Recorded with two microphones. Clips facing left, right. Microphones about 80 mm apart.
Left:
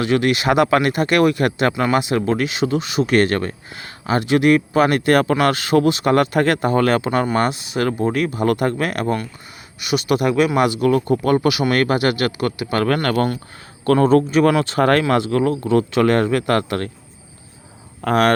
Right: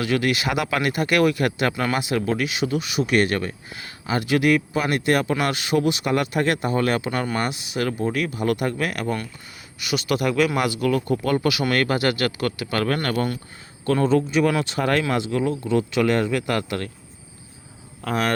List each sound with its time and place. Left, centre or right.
0.0 s speech: left
4.2 s speech: left
4.7 s speech: left
7.9 s speech: left
12.9 s speech: left
18.0 s speech: left